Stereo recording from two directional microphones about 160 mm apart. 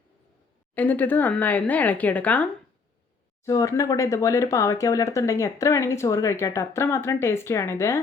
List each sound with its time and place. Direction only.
0.7 s speech: 10° left (ahead or behind)
3.4 s speech: 20° left (ahead or behind)